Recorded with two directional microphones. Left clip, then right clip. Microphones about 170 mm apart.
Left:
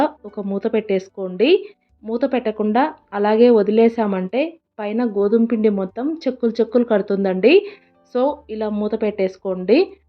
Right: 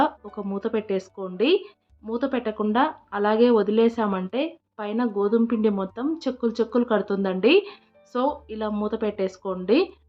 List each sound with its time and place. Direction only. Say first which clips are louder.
0.0 s a woman's voice: left 3 dB; 15° left (ahead or behind)